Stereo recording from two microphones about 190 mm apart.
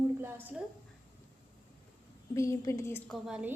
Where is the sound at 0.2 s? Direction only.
10° right (ahead or behind).